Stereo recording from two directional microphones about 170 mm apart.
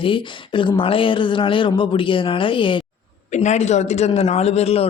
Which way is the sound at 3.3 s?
45° left (ahead or behind).